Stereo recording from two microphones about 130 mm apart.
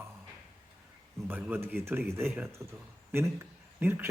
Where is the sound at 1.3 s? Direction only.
15° right (ahead or behind).